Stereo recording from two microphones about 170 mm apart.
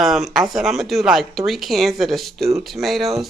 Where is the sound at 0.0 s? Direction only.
Centre (ahead or behind).